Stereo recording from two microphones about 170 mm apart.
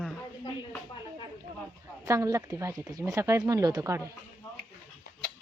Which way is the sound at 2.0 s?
20° right (ahead or behind).